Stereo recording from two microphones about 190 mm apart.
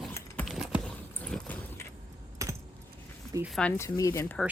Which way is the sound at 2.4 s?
15° right (ahead or behind).